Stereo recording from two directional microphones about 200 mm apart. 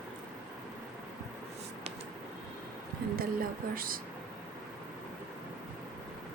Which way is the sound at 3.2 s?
45° right (ahead or behind).